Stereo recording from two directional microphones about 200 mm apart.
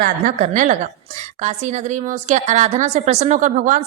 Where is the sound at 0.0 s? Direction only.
40° right (ahead or behind).